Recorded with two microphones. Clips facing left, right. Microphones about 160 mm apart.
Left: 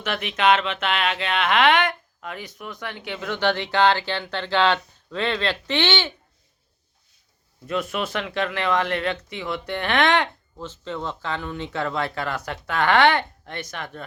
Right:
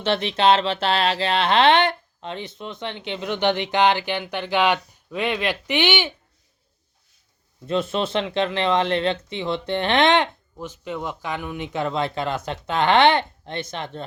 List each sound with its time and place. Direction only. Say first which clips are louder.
0.0 s speech: right 3 dB; 30° right (ahead or behind); by 6.1 s 15° right (ahead or behind)
7.7 s speech: right 3 dB; 25° right (ahead or behind)